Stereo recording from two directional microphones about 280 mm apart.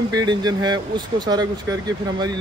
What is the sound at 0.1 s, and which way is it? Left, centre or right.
Speech, centre.